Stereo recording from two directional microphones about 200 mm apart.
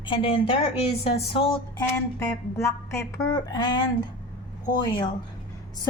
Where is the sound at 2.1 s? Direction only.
15° left (ahead or behind).